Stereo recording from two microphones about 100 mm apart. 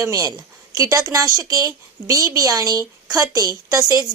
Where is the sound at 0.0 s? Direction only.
35° right (ahead or behind).